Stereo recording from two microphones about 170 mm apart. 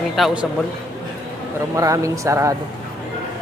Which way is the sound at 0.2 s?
5° right (ahead or behind).